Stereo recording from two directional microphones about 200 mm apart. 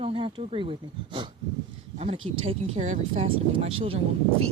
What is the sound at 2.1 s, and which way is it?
Speech, 80° right.